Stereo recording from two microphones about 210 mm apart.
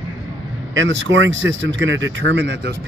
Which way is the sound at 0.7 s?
60° right (ahead or behind).